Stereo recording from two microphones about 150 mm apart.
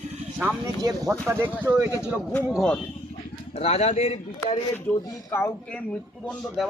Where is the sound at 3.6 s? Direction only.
45° left (ahead or behind).